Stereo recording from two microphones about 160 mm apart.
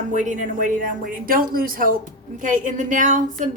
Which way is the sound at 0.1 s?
50° right (ahead or behind).